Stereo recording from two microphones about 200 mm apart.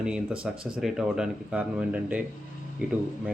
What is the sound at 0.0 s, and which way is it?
Speech, 5° right (ahead or behind).